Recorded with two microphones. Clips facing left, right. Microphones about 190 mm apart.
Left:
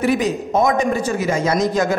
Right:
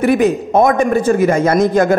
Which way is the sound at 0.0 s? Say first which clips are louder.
Right 5 dB; 55° right (ahead or behind).